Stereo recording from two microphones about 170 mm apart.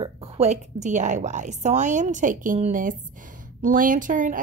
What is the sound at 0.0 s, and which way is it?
A woman's voice, 40° right (ahead or behind).